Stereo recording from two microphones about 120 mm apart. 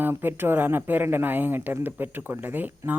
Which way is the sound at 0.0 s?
20° right (ahead or behind).